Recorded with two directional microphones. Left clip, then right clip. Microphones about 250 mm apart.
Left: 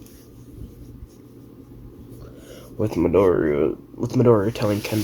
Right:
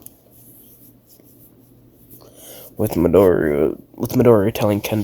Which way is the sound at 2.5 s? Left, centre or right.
Right.